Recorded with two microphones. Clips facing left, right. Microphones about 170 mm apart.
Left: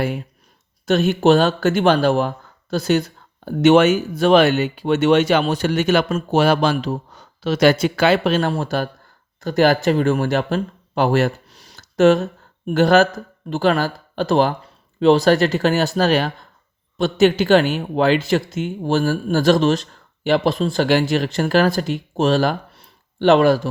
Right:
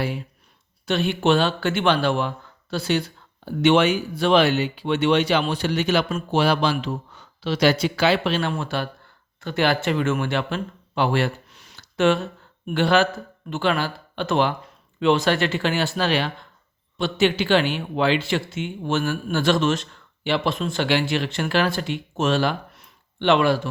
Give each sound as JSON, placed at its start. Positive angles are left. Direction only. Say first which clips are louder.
{"t": 0.0, "sound": "speech", "louder": "left 4 dB", "side_deg": 50}